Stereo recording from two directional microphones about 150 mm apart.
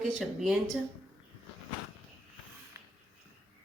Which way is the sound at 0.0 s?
Centre (ahead or behind).